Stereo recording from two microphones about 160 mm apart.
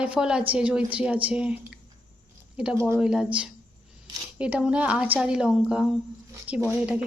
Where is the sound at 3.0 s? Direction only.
5° right (ahead or behind).